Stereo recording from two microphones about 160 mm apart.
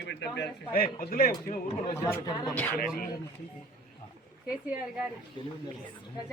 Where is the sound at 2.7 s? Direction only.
65° left (ahead or behind).